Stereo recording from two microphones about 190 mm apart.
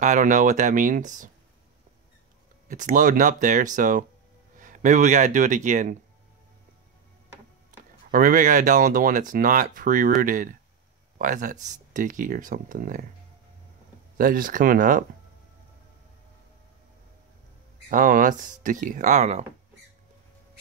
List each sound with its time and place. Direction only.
0.0 s speech: 40° right (ahead or behind)
2.7 s speech: 40° right (ahead or behind)
8.1 s speech: 45° right (ahead or behind)
14.1 s speech: 45° right (ahead or behind)
17.8 s speech: 45° right (ahead or behind)